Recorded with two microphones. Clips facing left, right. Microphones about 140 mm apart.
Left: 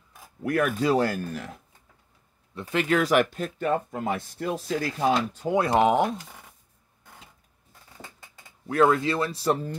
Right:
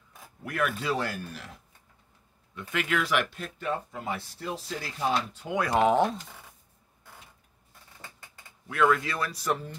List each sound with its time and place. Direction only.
0.5 s speech: 45° left (ahead or behind)
2.5 s speech: 30° left (ahead or behind)
5.6 s speech: 20° left (ahead or behind)
8.6 s speech: 35° left (ahead or behind)